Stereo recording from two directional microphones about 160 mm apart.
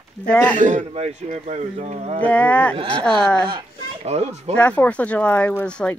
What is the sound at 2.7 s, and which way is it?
Speech, 35° right (ahead or behind).